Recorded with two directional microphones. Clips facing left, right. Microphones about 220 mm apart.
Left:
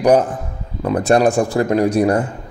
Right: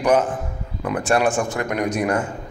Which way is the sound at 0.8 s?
35° left (ahead or behind).